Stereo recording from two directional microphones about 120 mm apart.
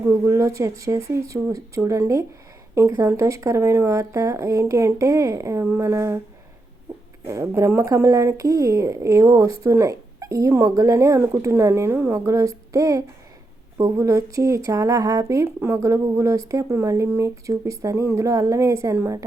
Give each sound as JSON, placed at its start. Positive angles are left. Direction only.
{"t": 0.3, "sound": "speech", "side_deg": -25}
{"t": 7.3, "sound": "speech", "side_deg": -25}